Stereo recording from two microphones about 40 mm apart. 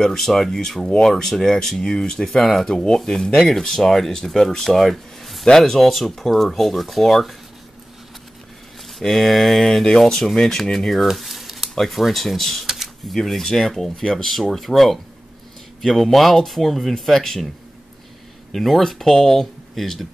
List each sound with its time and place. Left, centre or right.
0.0 s speech: centre
1.1 s speech: centre
2.7 s speech: centre
9.0 s speech: centre
11.1 s a sound: centre
11.7 s speech: centre
12.6 s a sound: centre
13.1 s speech: centre
18.5 s speech: centre